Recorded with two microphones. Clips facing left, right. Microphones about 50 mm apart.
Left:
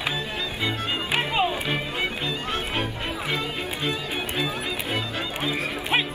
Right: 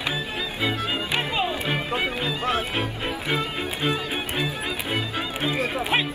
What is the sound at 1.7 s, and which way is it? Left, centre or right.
Music, centre.